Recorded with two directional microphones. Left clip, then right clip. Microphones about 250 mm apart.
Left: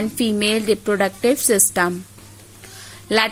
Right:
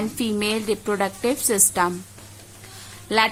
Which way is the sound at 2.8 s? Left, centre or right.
Centre.